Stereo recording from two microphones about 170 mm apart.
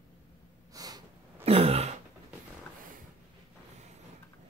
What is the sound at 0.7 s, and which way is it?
Snort, 20° right (ahead or behind).